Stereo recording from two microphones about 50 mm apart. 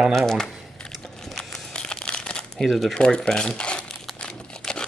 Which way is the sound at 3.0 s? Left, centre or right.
Centre.